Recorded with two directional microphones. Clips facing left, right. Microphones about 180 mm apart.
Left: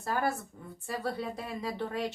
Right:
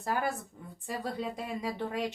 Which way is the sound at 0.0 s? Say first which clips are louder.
Left 1 dB; 15° right (ahead or behind).